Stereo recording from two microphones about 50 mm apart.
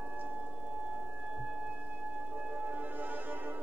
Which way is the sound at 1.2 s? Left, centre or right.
Centre.